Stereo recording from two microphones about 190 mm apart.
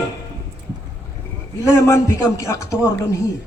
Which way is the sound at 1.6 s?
15° left (ahead or behind).